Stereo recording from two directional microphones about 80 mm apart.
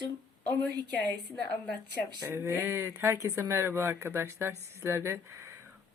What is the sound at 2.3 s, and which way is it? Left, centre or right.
Speech, right.